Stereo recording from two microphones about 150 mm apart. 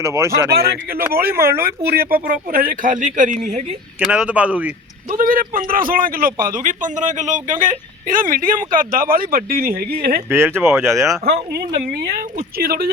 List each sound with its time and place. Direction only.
0.0 s speech: 20° right (ahead or behind)
0.5 s speech: 90° right; by 3.8 s 50° right (ahead or behind)
4.0 s speech: 5° right (ahead or behind)
5.1 s speech: 70° right (ahead or behind); by 10.2 s 85° right
10.2 s speech: 15° right (ahead or behind)
11.5 s a woman's voice: 80° right